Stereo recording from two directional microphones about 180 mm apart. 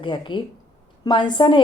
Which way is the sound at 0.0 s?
25° left (ahead or behind).